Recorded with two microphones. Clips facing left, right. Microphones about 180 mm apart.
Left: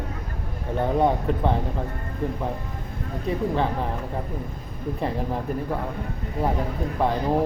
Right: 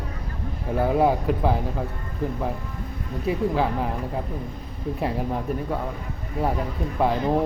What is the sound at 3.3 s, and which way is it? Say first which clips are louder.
Speech: right 1 dB; 5° right (ahead or behind).